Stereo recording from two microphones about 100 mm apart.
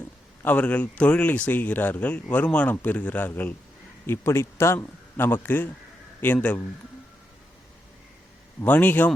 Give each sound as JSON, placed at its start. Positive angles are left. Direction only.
{"t": 0.4, "sound": "a man's voice", "side_deg": 15}
{"t": 8.6, "sound": "speech", "side_deg": 15}